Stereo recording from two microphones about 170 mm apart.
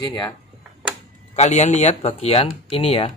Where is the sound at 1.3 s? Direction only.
40° left (ahead or behind).